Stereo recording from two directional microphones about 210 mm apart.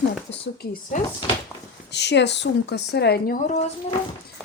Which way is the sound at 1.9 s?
55° left (ahead or behind).